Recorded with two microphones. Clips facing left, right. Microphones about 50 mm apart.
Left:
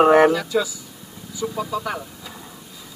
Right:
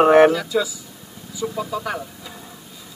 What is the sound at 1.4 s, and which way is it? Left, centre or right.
Speech, right.